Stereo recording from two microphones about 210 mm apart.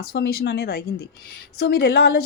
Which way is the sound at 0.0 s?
50° left (ahead or behind).